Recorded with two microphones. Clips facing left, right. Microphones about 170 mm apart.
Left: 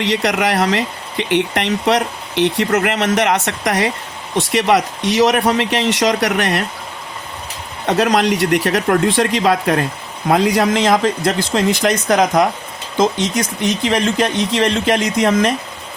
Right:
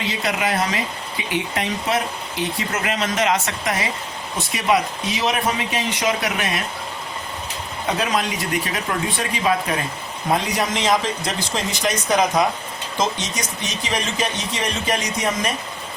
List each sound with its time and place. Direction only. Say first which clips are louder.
0.0 s speech: left 6 dB; 70° left (ahead or behind)
7.9 s speech: left 8 dB; 75° left (ahead or behind); by 12.5 s 60° left (ahead or behind)
13.8 s speech: left 6 dB; 60° left (ahead or behind)